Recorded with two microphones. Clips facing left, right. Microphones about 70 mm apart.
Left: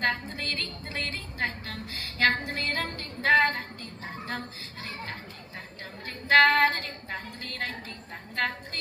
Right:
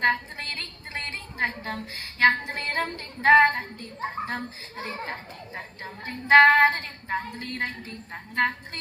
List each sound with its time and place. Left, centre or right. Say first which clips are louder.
0.0 s a woman's voice: right 4 dB; right
5.5 s female singing: right 4 dB; right